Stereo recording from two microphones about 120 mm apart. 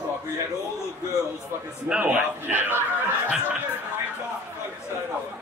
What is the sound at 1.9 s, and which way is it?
Speech, 10° right (ahead or behind).